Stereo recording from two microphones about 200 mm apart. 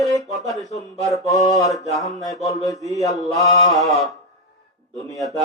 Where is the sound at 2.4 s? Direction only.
20° left (ahead or behind).